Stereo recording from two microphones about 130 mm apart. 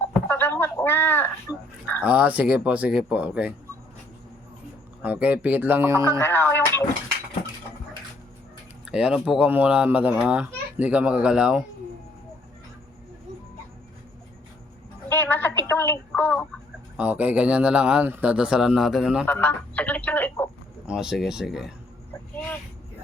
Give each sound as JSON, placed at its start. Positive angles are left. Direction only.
{"t": 0.1, "sound": "a sound", "side_deg": 15}
{"t": 2.0, "sound": "speech", "side_deg": -10}
{"t": 5.0, "sound": "speech", "side_deg": -10}
{"t": 6.1, "sound": "speech", "side_deg": 15}
{"t": 8.9, "sound": "speech", "side_deg": -10}
{"t": 15.1, "sound": "a sound", "side_deg": 15}
{"t": 15.7, "sound": "speech", "side_deg": 15}
{"t": 17.0, "sound": "speech", "side_deg": -10}
{"t": 19.2, "sound": "speech", "side_deg": 15}
{"t": 20.8, "sound": "speech", "side_deg": -5}